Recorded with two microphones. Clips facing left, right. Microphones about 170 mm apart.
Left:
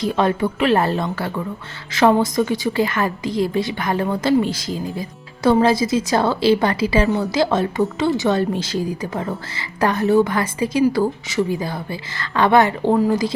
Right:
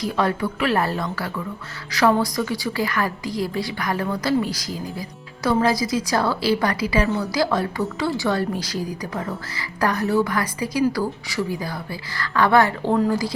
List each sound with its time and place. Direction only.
0.0 s a woman's voice: 25° left (ahead or behind)